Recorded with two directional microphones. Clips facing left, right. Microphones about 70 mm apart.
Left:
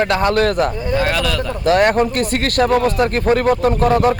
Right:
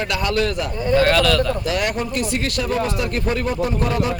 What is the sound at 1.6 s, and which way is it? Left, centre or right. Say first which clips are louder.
Speech: left 9 dB; left.